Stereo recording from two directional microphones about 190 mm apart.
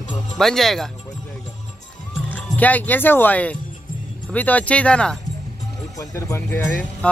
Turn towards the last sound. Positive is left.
turn(degrees=10)  # may be behind; listen again after turning